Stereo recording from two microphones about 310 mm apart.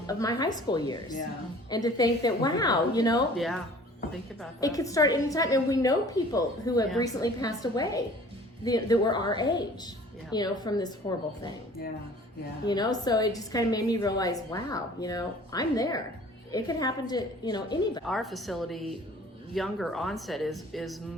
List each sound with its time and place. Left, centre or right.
0.1 s a woman's voice: centre
3.3 s speech: centre
4.6 s a woman's voice: centre
12.6 s a woman's voice: centre
18.0 s speech: centre